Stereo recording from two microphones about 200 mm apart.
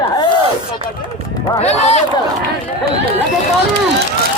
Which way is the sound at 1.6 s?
35° left (ahead or behind).